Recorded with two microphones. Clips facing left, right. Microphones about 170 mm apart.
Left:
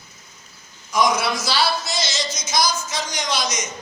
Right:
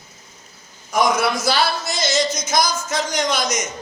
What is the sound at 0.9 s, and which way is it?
Speech, 55° right (ahead or behind).